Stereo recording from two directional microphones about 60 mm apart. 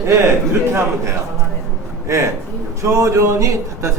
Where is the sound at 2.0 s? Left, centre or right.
Right.